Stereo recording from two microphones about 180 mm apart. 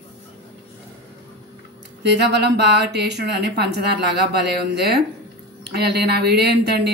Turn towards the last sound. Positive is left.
turn(degrees=-65)  # may be behind; listen again after turning